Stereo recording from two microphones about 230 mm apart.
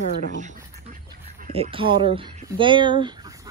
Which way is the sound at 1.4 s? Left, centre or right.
Right.